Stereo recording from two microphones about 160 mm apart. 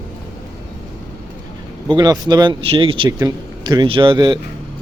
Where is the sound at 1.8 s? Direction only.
25° right (ahead or behind).